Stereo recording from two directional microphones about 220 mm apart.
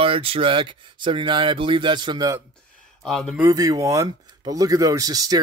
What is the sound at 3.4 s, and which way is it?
Speech, 15° right (ahead or behind).